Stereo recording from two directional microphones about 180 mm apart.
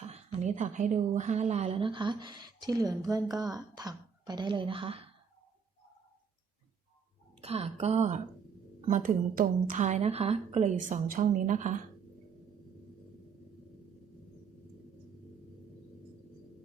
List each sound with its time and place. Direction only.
0.0 s a woman's voice: 35° right (ahead or behind)
7.4 s a woman's voice: 35° right (ahead or behind)
8.9 s a woman's voice: 50° right (ahead or behind)